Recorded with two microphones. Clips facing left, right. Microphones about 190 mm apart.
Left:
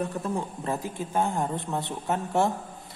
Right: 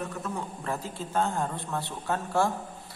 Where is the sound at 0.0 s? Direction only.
30° left (ahead or behind).